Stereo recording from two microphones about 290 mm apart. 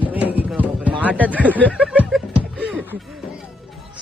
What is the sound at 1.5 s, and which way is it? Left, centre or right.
Snicker, centre.